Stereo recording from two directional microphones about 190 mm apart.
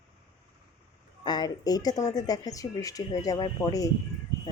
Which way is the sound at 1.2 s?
20° left (ahead or behind).